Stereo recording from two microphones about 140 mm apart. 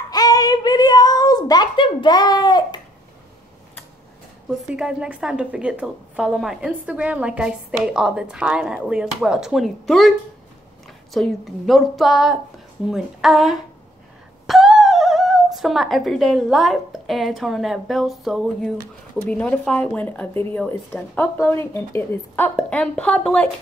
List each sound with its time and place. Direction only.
0.1 s a sound: 25° left (ahead or behind)
4.6 s a woman's voice: 5° right (ahead or behind)
11.1 s a woman's voice: centre (ahead or behind)